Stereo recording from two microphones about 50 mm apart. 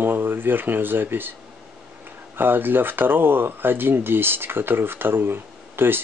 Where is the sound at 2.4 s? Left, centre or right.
Right.